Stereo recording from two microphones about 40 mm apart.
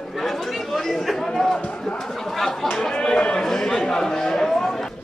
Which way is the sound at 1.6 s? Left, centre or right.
Left.